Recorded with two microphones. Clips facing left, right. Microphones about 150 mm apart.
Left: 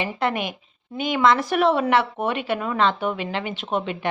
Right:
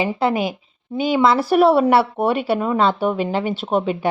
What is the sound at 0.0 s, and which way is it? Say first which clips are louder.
Speech: right 5 dB; 30° right (ahead or behind).